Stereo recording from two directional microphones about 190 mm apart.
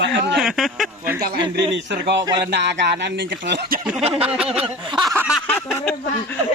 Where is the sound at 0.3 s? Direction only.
Centre (ahead or behind).